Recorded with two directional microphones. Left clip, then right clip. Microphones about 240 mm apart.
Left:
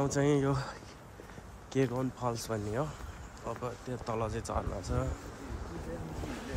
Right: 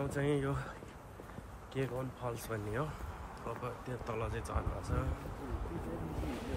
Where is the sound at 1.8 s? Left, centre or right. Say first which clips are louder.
Left 7 dB; left.